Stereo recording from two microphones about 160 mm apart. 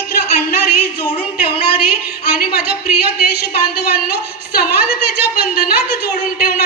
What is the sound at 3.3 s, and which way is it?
A woman's voice, 80° left.